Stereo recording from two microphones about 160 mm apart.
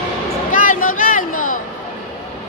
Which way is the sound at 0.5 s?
60° left (ahead or behind).